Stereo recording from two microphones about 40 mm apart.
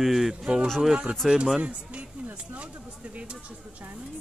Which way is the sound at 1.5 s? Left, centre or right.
Right.